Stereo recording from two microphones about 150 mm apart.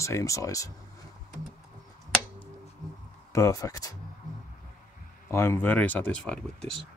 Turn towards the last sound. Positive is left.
turn(degrees=5)  # may be behind; listen again after turning